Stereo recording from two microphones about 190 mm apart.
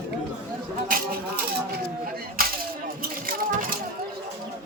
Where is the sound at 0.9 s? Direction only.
50° right (ahead or behind).